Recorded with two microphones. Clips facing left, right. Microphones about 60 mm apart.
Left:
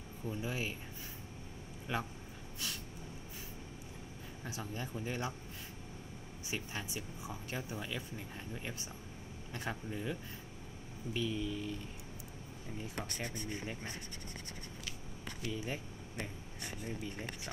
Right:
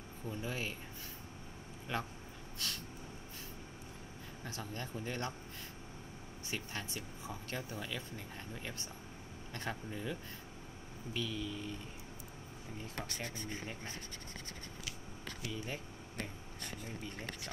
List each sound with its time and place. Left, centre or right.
0.3 s speech: centre
1.9 s speech: centre
4.5 s speech: centre
6.5 s speech: centre
9.5 s speech: centre
11.1 s speech: centre
13.2 s speech: centre
15.5 s speech: centre